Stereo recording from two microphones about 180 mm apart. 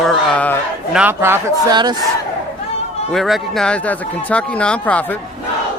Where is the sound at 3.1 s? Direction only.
Centre (ahead or behind).